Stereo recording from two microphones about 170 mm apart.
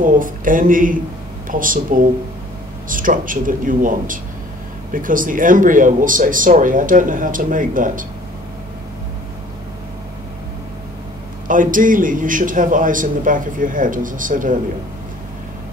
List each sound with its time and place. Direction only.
0.0 s a man's voice: 50° right (ahead or behind)
11.4 s a man's voice: 50° right (ahead or behind)